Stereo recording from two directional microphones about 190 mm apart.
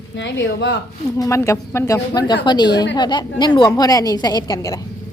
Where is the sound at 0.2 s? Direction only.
70° left (ahead or behind).